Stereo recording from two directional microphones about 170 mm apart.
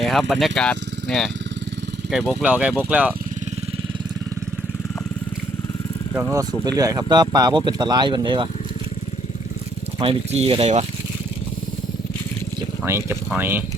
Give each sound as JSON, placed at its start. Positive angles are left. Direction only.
{"t": 0.0, "sound": "speech", "side_deg": 0}
{"t": 6.1, "sound": "speech", "side_deg": -15}
{"t": 10.0, "sound": "speech", "side_deg": -35}
{"t": 12.8, "sound": "speech", "side_deg": -15}